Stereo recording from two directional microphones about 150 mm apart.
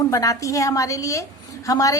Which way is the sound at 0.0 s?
25° left (ahead or behind).